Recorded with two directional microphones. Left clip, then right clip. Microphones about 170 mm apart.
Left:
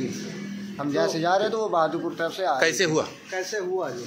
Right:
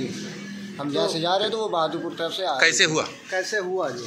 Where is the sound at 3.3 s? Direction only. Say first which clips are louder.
Right 3 dB; 55° right (ahead or behind).